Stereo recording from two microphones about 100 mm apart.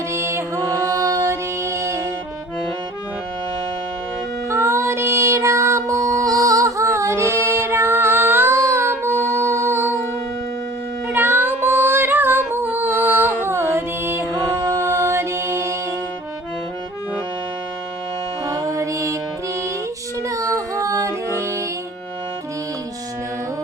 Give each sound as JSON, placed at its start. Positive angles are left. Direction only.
{"t": 0.1, "sound": "music", "side_deg": -30}
{"t": 4.4, "sound": "music", "side_deg": -30}
{"t": 11.1, "sound": "female singing", "side_deg": -20}
{"t": 18.4, "sound": "music", "side_deg": -35}
{"t": 20.2, "sound": "child singing", "side_deg": -35}